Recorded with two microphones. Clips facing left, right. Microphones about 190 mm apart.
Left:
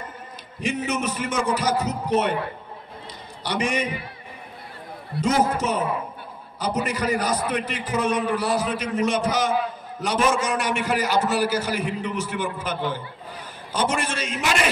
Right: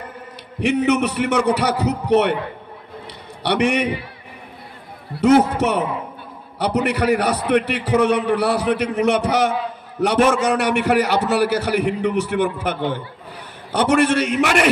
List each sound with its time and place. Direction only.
0.6 s a man's voice: 65° right (ahead or behind)
3.4 s a man's voice: 65° right (ahead or behind)
5.2 s a man's voice: 65° right (ahead or behind)